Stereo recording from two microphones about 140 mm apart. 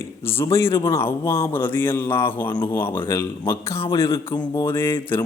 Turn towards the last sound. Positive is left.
turn(degrees=15)  # may be behind; listen again after turning